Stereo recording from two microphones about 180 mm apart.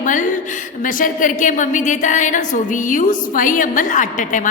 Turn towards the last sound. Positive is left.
turn(degrees=45)  # may be behind; listen again after turning